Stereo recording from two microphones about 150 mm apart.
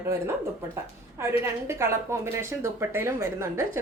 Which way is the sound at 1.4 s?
15° right (ahead or behind).